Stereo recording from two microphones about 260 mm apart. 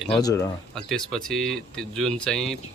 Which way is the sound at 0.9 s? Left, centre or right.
Centre.